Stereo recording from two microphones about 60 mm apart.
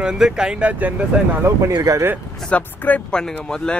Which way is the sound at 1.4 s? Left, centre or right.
Right.